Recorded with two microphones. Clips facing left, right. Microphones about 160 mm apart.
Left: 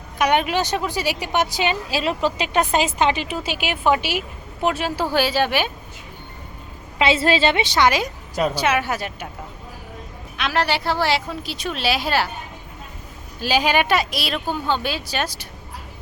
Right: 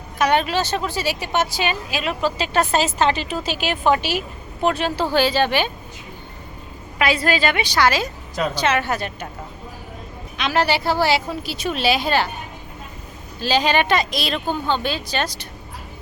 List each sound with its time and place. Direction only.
0.2 s a woman's voice: 15° left (ahead or behind)
1.9 s speech: 30° left (ahead or behind)
2.4 s a woman's voice: 15° left (ahead or behind)
7.0 s a woman's voice: 25° left (ahead or behind); by 9.3 s 10° left (ahead or behind)
10.3 s a woman's voice: centre (ahead or behind)
13.4 s a woman's voice: 10° left (ahead or behind)